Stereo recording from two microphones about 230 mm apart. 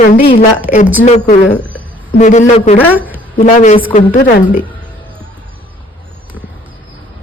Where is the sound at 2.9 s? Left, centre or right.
Centre.